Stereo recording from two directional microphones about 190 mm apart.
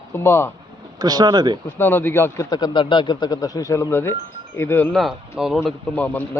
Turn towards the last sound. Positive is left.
turn(degrees=10)  # may be behind; listen again after turning